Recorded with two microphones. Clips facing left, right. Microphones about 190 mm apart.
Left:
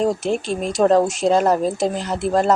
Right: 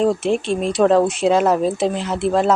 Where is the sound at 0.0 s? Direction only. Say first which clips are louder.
Right 2 dB; centre (ahead or behind).